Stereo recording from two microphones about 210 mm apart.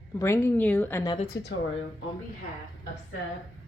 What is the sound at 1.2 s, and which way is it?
Speech, 50° left (ahead or behind).